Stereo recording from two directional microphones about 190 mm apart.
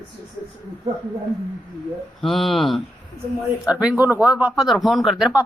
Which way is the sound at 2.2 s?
Centre (ahead or behind).